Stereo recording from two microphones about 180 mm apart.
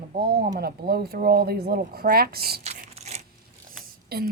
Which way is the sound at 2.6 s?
40° right (ahead or behind).